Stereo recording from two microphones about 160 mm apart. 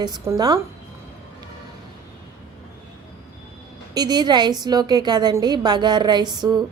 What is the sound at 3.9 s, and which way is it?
A woman's voice, 25° right (ahead or behind).